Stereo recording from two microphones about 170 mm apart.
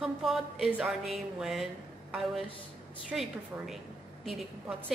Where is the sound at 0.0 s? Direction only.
Centre (ahead or behind).